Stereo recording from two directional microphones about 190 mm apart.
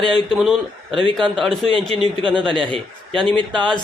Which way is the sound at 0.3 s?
Centre (ahead or behind).